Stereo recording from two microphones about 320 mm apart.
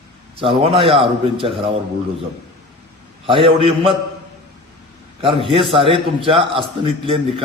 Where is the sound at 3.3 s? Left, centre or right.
Centre.